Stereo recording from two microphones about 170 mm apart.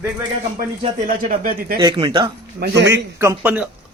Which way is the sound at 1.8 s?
25° right (ahead or behind).